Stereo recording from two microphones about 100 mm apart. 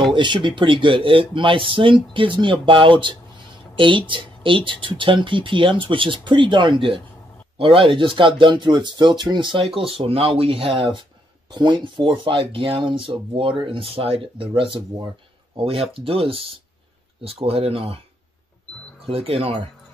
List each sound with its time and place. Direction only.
0.1 s speech: 55° right (ahead or behind)
9.8 s speech: 70° right (ahead or behind)
11.5 s speech: 50° right (ahead or behind); by 18.0 s 70° right (ahead or behind)
19.0 s speech: 70° right (ahead or behind)